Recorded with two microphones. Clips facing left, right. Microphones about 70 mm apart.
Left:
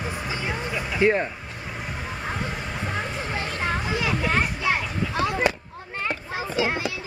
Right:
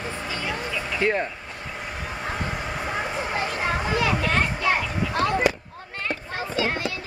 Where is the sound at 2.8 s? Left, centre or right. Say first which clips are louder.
Right 2 dB; centre.